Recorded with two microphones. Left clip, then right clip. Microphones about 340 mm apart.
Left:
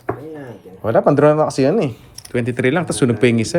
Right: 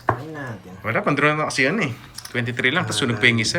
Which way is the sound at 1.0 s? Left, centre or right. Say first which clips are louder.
Left 7 dB; left.